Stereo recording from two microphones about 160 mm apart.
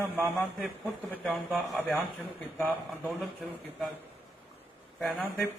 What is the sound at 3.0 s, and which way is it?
Speech, centre (ahead or behind).